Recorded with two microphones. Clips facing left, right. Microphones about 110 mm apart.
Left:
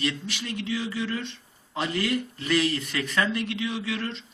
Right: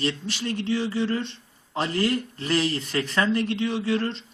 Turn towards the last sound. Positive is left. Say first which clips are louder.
# right 6 dB
turn(degrees=-35)  # may be behind; listen again after turning